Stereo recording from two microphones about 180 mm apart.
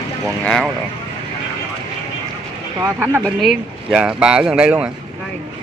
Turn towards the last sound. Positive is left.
turn(degrees=-5)  # may be behind; listen again after turning